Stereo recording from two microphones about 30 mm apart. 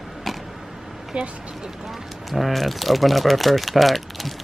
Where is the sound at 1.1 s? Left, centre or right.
Right.